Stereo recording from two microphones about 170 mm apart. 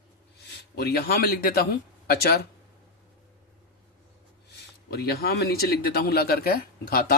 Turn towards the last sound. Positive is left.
turn(degrees=60)  # may be behind; listen again after turning